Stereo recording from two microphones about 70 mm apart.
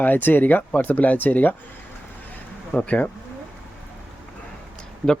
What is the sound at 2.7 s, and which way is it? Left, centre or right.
Speech, left.